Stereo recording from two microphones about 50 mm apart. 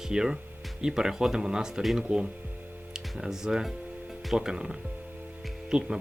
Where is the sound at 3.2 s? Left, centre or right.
Centre.